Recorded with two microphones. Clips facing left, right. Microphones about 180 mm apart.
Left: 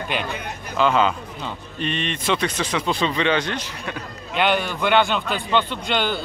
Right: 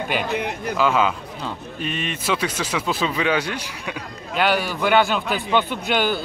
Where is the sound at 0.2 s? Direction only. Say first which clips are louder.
Right 5 dB; 65° right (ahead or behind).